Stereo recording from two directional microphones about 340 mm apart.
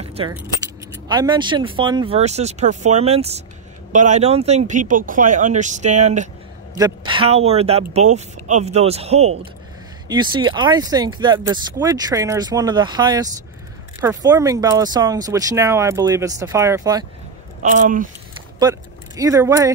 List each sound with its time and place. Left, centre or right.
0.1 s speech: centre
17.6 s speech: right
18.6 s speech: centre